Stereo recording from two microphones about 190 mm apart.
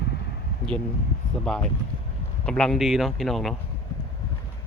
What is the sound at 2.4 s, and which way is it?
Speech, 5° left (ahead or behind).